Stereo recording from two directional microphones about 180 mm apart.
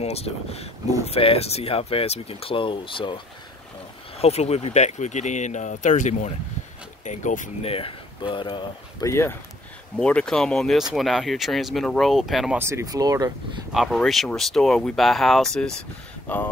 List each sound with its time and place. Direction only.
0.0 s speech: 35° left (ahead or behind)
4.2 s speech: 35° left (ahead or behind)
7.7 s speech: 30° left (ahead or behind)
9.1 s speech: 15° left (ahead or behind); by 12.5 s centre (ahead or behind)
12.5 s speech: 15° right (ahead or behind)
13.7 s speech: centre (ahead or behind)